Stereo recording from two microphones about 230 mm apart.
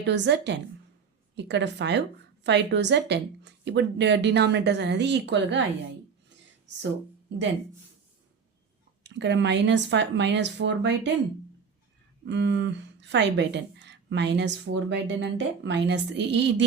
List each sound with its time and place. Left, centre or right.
0.0 s speech: right
9.0 s speech: right
12.2 s speech: right